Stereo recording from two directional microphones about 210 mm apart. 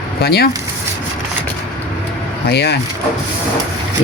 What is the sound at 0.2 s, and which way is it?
Speech, 50° left (ahead or behind).